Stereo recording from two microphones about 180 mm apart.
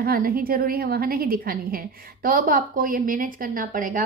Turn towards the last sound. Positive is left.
turn(degrees=-50)  # may be behind; listen again after turning